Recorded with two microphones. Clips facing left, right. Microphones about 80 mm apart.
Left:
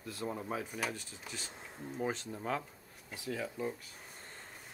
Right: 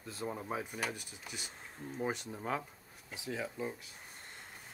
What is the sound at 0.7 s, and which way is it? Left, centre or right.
Speech, centre.